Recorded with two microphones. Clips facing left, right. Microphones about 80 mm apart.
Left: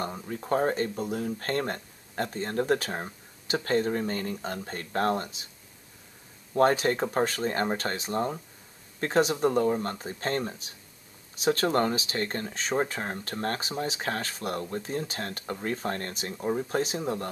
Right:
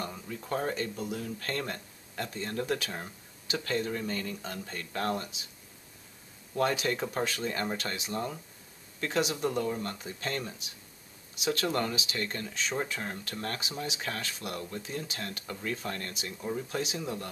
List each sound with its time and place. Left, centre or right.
0.0 s speech: left
6.5 s speech: left